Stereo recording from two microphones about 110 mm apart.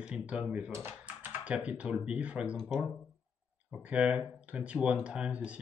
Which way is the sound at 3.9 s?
10° right (ahead or behind).